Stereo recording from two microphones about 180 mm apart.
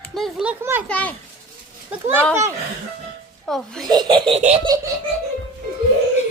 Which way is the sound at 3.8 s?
25° right (ahead or behind).